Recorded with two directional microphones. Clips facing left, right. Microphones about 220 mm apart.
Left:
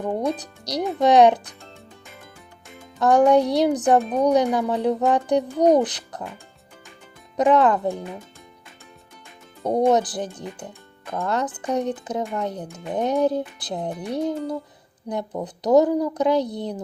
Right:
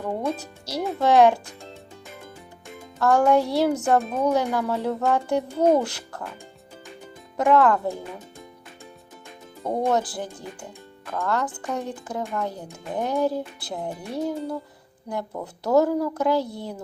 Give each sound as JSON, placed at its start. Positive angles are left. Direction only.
{"t": 0.0, "sound": "a woman's voice", "side_deg": 15}
{"t": 3.0, "sound": "a child's voice", "side_deg": 20}
{"t": 7.3, "sound": "a woman's voice", "side_deg": 20}
{"t": 9.6, "sound": "a woman's voice", "side_deg": 20}